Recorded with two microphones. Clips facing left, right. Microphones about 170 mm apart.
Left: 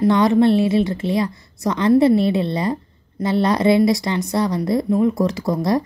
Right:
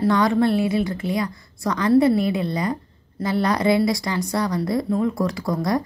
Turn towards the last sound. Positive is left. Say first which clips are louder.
# left 3 dB
turn(degrees=25)  # may be behind; listen again after turning